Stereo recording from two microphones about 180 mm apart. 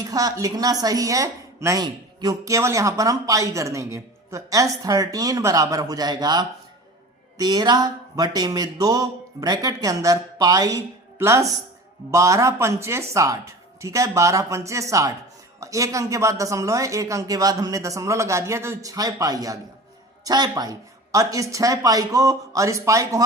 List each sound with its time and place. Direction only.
0.1 s a woman's voice: 20° right (ahead or behind)